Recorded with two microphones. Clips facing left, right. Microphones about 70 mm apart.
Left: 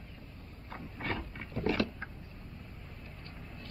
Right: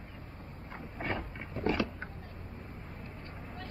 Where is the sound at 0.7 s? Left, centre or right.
Centre.